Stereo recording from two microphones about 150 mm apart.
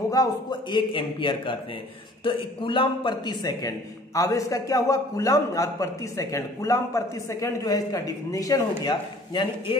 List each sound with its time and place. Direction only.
0.1 s a man's voice: 25° left (ahead or behind)